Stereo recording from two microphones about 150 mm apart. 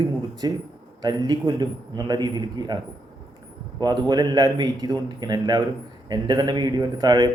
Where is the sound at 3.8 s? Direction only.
25° right (ahead or behind).